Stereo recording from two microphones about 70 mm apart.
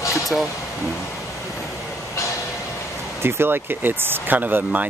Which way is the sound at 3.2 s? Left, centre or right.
Right.